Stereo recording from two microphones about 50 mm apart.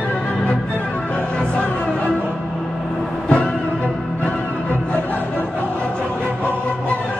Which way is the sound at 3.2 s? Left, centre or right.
Left.